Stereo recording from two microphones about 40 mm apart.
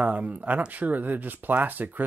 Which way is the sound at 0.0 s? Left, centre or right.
Right.